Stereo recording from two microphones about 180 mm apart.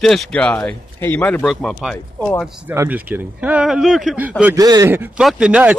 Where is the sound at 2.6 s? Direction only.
10° right (ahead or behind).